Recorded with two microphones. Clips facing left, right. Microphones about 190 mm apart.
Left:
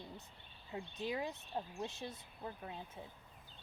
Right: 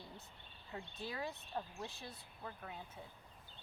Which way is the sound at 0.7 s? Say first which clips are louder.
Left 5 dB; 20° left (ahead or behind).